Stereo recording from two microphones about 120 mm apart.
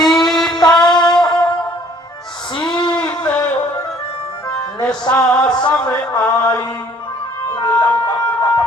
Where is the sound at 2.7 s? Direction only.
40° left (ahead or behind).